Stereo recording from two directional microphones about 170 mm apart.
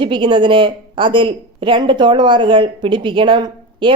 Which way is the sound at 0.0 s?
30° right (ahead or behind).